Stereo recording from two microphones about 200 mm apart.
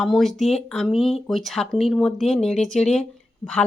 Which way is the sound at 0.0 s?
Centre (ahead or behind).